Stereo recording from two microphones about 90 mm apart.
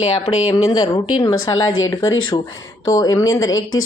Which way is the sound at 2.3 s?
60° left (ahead or behind).